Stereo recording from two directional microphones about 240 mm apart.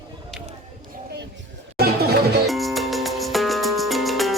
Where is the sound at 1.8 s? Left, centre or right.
Right.